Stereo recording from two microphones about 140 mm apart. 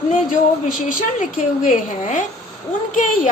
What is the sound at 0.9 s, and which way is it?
A woman's voice, 70° left (ahead or behind).